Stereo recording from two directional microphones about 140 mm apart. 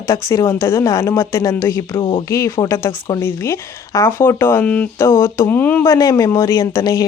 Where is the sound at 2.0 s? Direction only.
35° left (ahead or behind).